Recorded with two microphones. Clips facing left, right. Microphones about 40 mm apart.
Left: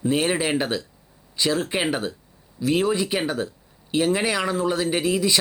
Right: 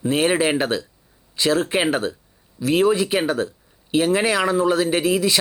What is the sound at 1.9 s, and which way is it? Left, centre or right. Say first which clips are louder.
Speech: right 4 dB; centre.